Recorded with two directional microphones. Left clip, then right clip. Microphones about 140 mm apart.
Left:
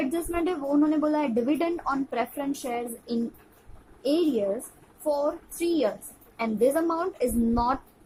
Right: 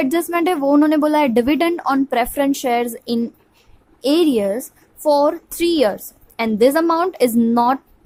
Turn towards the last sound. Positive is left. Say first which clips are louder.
# right 10 dB
turn(degrees=-50)  # may be behind; listen again after turning